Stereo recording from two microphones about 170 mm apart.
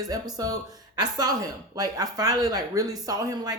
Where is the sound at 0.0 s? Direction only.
20° right (ahead or behind).